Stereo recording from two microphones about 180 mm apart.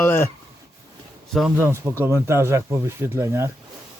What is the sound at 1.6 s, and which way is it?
Speech, 15° right (ahead or behind).